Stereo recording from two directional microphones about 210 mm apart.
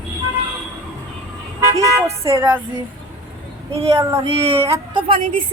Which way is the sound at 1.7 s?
15° right (ahead or behind).